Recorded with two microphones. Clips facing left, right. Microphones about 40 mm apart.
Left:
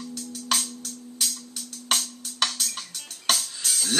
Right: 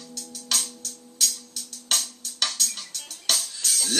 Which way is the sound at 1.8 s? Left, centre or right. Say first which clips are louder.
Left 2 dB; centre.